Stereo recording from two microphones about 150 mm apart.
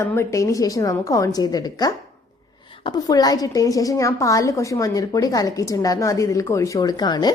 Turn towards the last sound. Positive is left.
turn(degrees=25)  # may be behind; listen again after turning